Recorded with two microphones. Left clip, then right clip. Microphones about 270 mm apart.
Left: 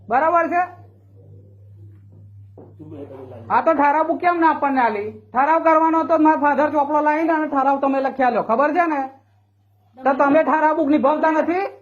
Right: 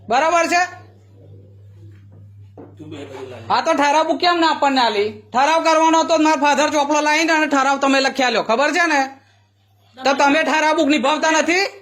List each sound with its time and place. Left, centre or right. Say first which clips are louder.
0.1 s speech: right 2 dB; right
3.4 s speech: even; right
3.9 s a woman's voice: right 2 dB; right